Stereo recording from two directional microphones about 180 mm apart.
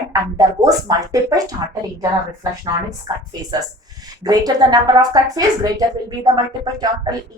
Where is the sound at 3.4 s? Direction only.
20° right (ahead or behind).